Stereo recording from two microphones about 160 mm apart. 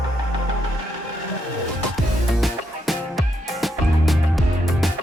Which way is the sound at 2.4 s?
Centre (ahead or behind).